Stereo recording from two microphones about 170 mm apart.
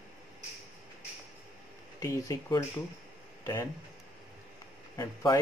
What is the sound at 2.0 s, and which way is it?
Speech, 20° left (ahead or behind).